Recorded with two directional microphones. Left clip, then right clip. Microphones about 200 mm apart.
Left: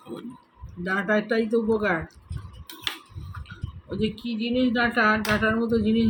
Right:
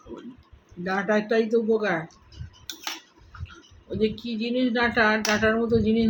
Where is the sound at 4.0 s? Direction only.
15° left (ahead or behind).